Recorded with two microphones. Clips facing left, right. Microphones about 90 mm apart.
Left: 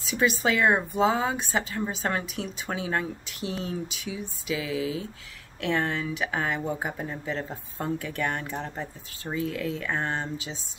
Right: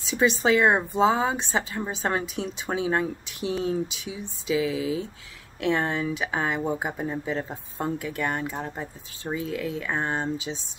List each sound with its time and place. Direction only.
0.1 s speech: 25° right (ahead or behind)